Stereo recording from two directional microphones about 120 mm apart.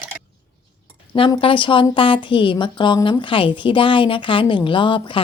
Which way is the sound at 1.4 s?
45° left (ahead or behind).